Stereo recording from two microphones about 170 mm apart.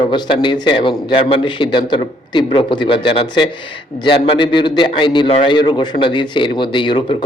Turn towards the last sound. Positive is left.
turn(degrees=30)  # may be behind; listen again after turning